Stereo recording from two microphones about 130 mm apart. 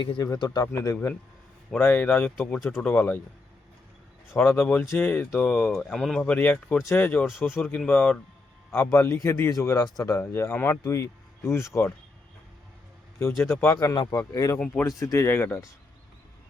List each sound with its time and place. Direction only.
0.2 s speech: 30° left (ahead or behind); by 3.2 s 10° left (ahead or behind)
4.4 s speech: 15° left (ahead or behind)
13.6 s speech: 20° left (ahead or behind)
13.9 s speech: 35° left (ahead or behind)
14.5 s speech: 15° left (ahead or behind)